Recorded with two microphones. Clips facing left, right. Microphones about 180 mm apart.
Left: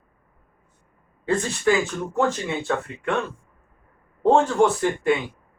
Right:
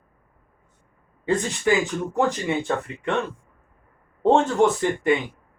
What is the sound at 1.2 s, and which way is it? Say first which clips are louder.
Speech: even; 20° right (ahead or behind).